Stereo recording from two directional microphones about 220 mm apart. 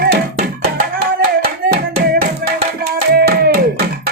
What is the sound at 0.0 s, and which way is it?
Music, 45° right (ahead or behind).